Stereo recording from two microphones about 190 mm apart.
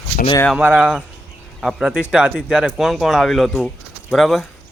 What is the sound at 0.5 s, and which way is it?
Speech, 5° right (ahead or behind).